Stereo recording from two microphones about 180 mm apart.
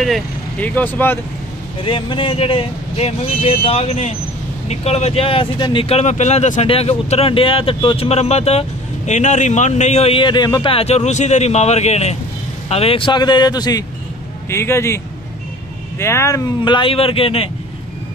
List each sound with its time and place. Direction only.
0.0 s speech: 5° left (ahead or behind)
1.8 s a man's voice: 30° left (ahead or behind)
16.0 s speech: 15° left (ahead or behind); by 17.5 s 30° left (ahead or behind)